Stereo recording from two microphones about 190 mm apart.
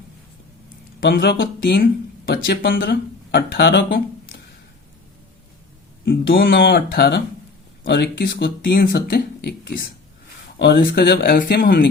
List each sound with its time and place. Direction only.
1.0 s speech: 55° left (ahead or behind)
6.5 s speech: 55° left (ahead or behind)